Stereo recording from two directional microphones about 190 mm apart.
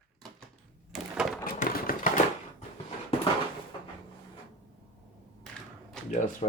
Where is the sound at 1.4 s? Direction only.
45° left (ahead or behind).